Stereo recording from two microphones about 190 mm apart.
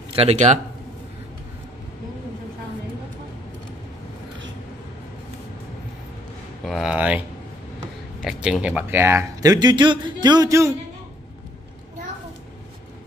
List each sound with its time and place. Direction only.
0.1 s speech: 35° right (ahead or behind)
6.6 s a sound: centre (ahead or behind)
8.2 s speech: centre (ahead or behind)